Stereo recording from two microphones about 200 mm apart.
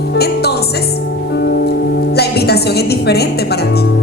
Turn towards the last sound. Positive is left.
turn(degrees=55)  # may be behind; listen again after turning